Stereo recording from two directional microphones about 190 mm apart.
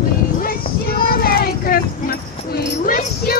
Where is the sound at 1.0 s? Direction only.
50° left (ahead or behind).